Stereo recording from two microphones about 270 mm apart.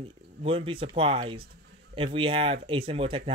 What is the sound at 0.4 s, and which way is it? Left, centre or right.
Speech, right.